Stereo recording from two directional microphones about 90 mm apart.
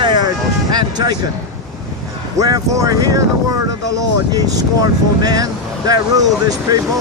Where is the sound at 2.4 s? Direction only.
40° right (ahead or behind).